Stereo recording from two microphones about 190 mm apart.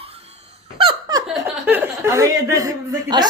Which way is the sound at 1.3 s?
10° right (ahead or behind).